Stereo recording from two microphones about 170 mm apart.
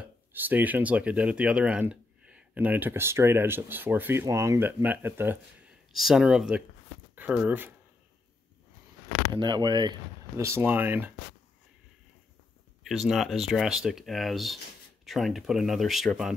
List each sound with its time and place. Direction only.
0.0 s speech: 10° right (ahead or behind)
5.9 s speech: centre (ahead or behind)
9.3 s speech: 25° right (ahead or behind)
12.8 s speech: centre (ahead or behind)